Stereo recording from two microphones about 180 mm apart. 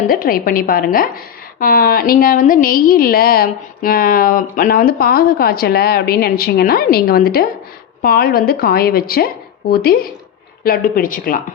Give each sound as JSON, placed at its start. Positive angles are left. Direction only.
{"t": 0.1, "sound": "a woman's voice", "side_deg": 55}